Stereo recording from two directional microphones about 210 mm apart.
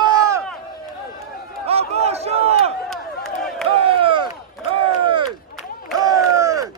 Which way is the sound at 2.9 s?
Centre (ahead or behind).